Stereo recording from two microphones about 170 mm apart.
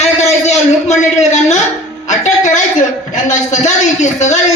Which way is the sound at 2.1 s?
45° left (ahead or behind).